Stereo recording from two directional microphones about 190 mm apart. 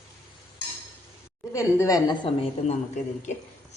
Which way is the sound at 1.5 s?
15° left (ahead or behind).